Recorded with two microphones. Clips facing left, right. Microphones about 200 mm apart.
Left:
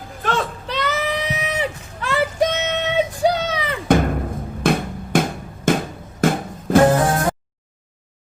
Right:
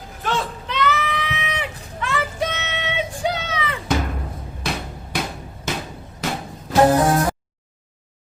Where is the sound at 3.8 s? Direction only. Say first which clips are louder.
Left 8 dB; 50° left (ahead or behind).